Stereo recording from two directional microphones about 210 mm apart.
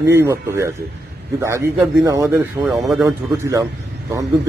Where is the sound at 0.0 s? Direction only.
15° right (ahead or behind).